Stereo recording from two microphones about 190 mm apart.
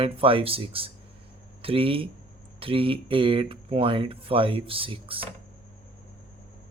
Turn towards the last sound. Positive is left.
turn(degrees=-30)  # may be behind; listen again after turning